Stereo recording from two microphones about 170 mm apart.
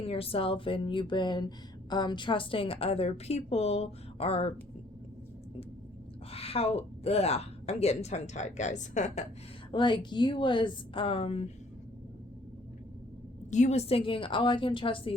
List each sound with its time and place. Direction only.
0.0 s speech: 35° left (ahead or behind)
6.3 s speech: 35° left (ahead or behind)
9.7 s speech: 25° left (ahead or behind)
13.5 s speech: 45° left (ahead or behind)